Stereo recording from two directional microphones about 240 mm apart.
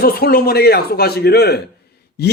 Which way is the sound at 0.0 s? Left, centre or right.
Left.